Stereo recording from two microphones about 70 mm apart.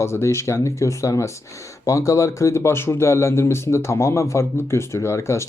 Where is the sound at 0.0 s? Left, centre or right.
Left.